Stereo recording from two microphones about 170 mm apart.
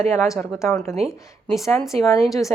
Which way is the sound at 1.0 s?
Centre (ahead or behind).